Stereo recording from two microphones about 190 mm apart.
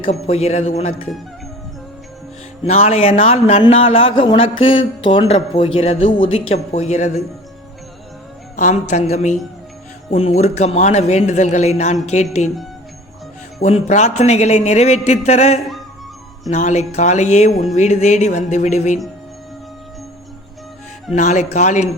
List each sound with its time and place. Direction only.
0.0 s a man's voice: 30° left (ahead or behind)
2.6 s a man's voice: 35° left (ahead or behind)
8.5 s a man's voice: 40° left (ahead or behind)
13.6 s a man's voice: 35° left (ahead or behind)
21.1 s a man's voice: 40° left (ahead or behind)